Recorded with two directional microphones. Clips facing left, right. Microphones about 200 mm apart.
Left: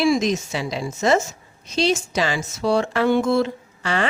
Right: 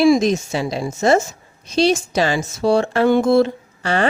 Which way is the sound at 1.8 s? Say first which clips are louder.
Right 4 dB; 35° right (ahead or behind).